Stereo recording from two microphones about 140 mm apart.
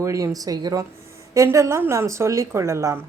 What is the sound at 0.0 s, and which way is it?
A woman's voice, 25° right (ahead or behind).